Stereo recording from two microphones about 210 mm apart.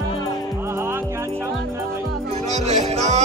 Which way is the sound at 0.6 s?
10° right (ahead or behind).